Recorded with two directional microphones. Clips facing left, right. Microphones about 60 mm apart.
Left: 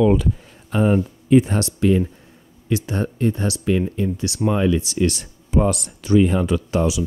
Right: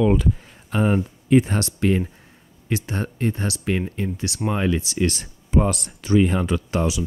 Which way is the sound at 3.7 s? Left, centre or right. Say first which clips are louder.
Left 4 dB; right.